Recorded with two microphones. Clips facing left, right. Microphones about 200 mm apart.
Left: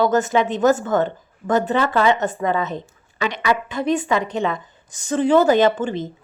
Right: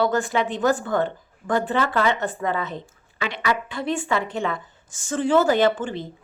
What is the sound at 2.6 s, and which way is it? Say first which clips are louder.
A woman's voice: left 5 dB; 20° left (ahead or behind).